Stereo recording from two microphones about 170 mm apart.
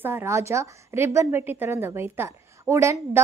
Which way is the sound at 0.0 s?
15° right (ahead or behind).